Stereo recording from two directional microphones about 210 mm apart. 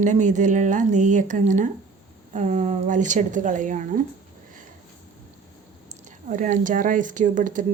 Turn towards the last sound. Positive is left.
turn(degrees=-40)  # may be behind; listen again after turning